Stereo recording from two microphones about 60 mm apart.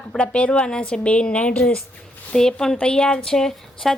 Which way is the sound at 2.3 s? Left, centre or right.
Centre.